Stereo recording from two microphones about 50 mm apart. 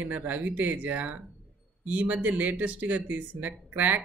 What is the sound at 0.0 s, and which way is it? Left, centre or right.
Speech, right.